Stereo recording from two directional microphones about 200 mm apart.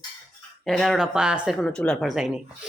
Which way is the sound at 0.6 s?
Centre (ahead or behind).